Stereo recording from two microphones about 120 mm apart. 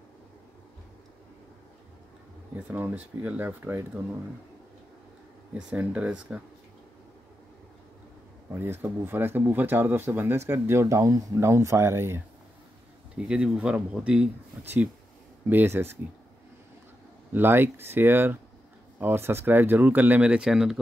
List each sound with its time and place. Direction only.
2.5 s speech: 15° right (ahead or behind)
5.6 s speech: 10° right (ahead or behind)
8.5 s speech: 20° right (ahead or behind)
13.1 s speech: 10° right (ahead or behind)
15.4 s speech: 20° right (ahead or behind)
17.3 s speech: 15° right (ahead or behind)